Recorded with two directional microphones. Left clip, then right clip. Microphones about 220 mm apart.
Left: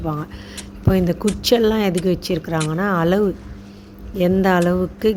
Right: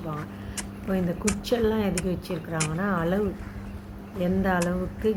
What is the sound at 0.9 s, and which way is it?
Speech, 45° left (ahead or behind).